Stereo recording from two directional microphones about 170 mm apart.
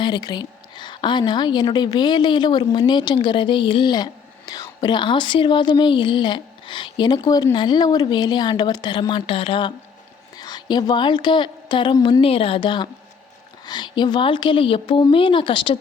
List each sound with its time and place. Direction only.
0.0 s a woman's voice: 25° left (ahead or behind)